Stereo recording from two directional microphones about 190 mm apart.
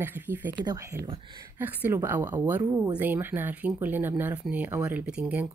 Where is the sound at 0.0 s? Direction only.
10° right (ahead or behind).